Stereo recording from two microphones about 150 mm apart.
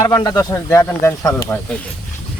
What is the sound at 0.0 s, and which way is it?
Speech, 25° left (ahead or behind).